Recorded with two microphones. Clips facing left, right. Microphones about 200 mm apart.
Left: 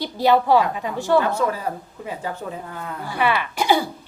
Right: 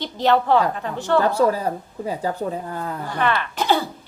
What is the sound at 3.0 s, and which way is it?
Speech, 10° left (ahead or behind).